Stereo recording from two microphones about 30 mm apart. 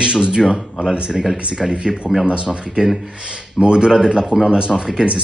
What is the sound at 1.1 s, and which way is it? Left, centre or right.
Speech, centre.